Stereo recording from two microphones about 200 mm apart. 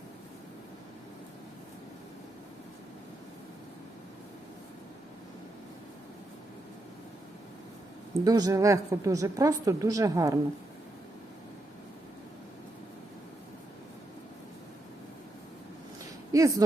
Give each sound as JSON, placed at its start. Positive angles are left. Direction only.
{"t": 8.2, "sound": "a woman's voice", "side_deg": -20}
{"t": 16.3, "sound": "speech", "side_deg": -15}